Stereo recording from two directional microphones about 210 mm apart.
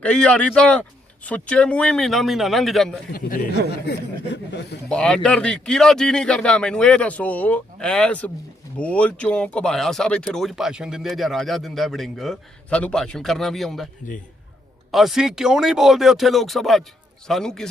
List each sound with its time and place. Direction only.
0.0 s speech: 5° left (ahead or behind)
3.1 s speech: 40° left (ahead or behind)
3.8 s speech: 55° left (ahead or behind)
4.9 s speech: 5° left (ahead or behind)
14.9 s speech: centre (ahead or behind)